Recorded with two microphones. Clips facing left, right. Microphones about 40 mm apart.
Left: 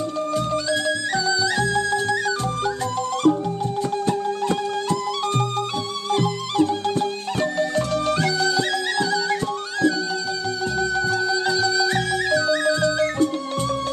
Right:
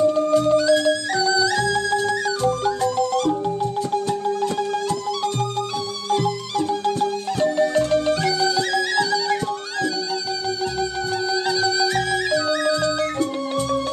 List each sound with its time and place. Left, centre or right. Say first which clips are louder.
0.2 s music: right 6 dB; centre
6.0 s music: right 1 dB; centre
11.4 s music: even; centre